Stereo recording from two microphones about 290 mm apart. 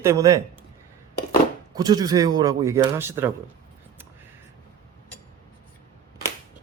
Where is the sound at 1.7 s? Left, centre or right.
Centre.